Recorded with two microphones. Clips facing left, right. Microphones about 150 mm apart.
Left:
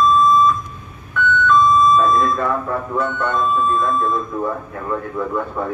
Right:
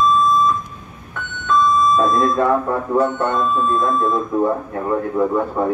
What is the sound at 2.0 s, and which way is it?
Speech, 45° right (ahead or behind).